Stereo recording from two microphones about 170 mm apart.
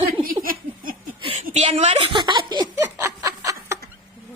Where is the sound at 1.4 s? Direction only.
40° right (ahead or behind).